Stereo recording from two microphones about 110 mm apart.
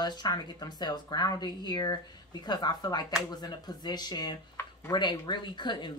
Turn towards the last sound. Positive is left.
turn(degrees=45)  # may be behind; listen again after turning